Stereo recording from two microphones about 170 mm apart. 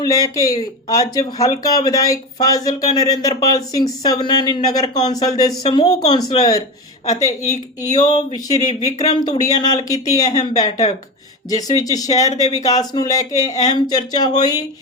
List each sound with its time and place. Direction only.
0.0 s speech: 20° left (ahead or behind)